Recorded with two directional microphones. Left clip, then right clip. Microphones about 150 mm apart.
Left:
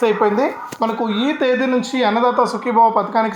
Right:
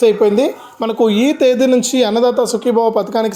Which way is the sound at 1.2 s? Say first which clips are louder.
Right 2 dB; 60° right (ahead or behind).